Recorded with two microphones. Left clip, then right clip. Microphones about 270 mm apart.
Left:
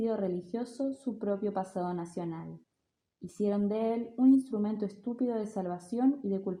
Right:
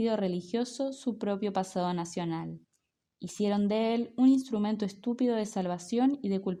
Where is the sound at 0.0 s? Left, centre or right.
Right.